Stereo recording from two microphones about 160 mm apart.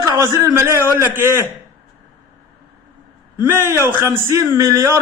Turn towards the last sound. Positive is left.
turn(degrees=-20)  # may be behind; listen again after turning